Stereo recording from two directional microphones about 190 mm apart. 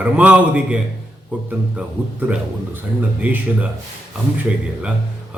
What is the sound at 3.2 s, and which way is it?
Speech, 5° right (ahead or behind).